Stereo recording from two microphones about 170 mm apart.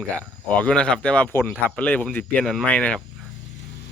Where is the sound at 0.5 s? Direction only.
5° left (ahead or behind).